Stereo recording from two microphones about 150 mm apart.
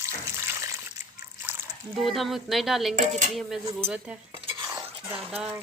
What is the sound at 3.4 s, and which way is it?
Speech, centre (ahead or behind).